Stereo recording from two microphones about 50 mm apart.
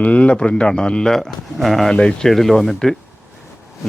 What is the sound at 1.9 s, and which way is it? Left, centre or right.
Speech, centre.